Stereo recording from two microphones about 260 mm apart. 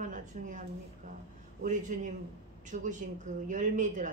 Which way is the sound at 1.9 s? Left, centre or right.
Right.